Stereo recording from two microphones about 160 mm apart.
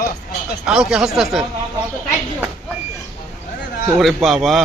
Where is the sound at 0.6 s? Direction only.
5° right (ahead or behind).